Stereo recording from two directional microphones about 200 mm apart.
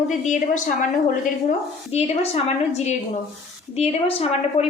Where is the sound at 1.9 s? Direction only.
30° left (ahead or behind).